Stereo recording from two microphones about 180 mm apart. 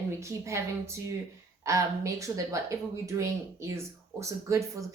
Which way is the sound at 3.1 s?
20° right (ahead or behind).